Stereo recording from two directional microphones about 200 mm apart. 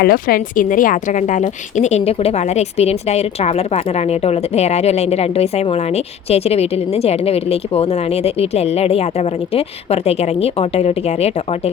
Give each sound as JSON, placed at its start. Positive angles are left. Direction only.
{"t": 0.0, "sound": "speech", "side_deg": 50}